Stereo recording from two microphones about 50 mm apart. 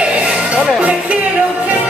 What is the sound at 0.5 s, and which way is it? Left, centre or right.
Music, centre.